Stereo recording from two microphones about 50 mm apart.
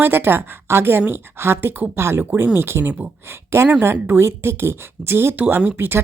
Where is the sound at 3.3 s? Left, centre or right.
Right.